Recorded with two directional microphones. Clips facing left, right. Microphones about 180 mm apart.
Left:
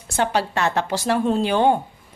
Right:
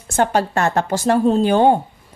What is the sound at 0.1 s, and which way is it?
A woman's voice, 45° right (ahead or behind).